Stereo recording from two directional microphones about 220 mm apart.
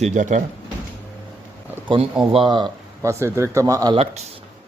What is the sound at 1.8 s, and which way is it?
A man's voice, 25° right (ahead or behind).